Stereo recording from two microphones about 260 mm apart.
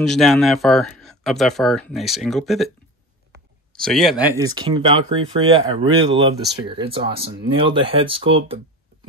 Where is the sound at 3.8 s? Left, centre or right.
Centre.